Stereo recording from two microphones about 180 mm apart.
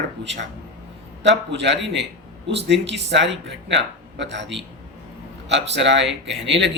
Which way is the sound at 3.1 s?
75° right (ahead or behind).